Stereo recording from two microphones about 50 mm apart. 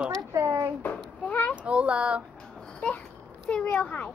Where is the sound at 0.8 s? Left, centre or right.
Left.